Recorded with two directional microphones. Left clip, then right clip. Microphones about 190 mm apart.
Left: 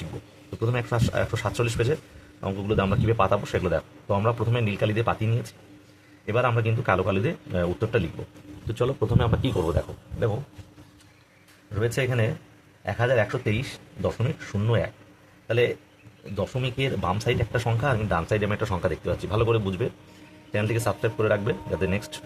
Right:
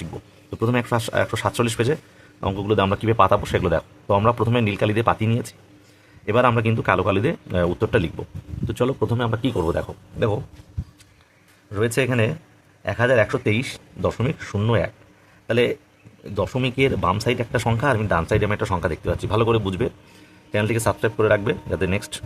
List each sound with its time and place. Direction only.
0.6 s speech: 45° right (ahead or behind); by 9.6 s 25° right (ahead or behind)
9.6 s speech: 45° right (ahead or behind)
11.7 s speech: 50° right (ahead or behind)